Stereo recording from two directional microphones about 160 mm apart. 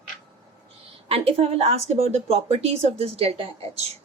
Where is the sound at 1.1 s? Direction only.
35° right (ahead or behind).